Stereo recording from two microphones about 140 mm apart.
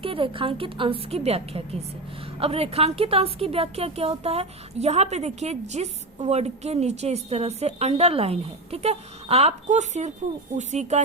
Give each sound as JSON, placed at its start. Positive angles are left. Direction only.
{"t": 0.0, "sound": "a woman's voice", "side_deg": -40}